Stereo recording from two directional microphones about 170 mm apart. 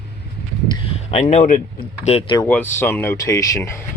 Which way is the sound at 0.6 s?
30° left (ahead or behind).